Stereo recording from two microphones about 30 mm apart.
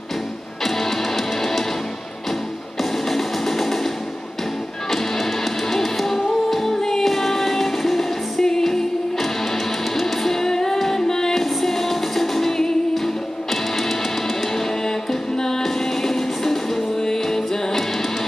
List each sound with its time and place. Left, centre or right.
0.7 s music: centre
2.8 s music: centre
4.9 s music: centre
8.5 s music: centre
9.9 s music: centre
11.3 s music: centre
14.5 s music: centre